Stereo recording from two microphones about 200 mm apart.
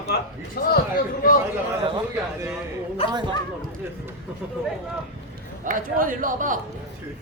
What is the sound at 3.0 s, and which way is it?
Speech, 30° left (ahead or behind).